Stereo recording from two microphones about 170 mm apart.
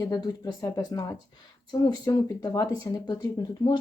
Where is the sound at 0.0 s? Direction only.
20° left (ahead or behind).